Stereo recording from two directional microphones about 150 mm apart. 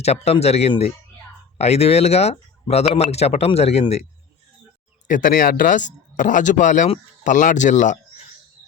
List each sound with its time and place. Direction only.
0.0 s speech: 45° left (ahead or behind)
5.0 s speech: 60° left (ahead or behind)